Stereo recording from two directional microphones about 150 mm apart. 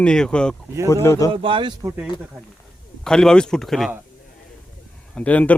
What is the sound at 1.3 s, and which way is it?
Speech, 35° right (ahead or behind).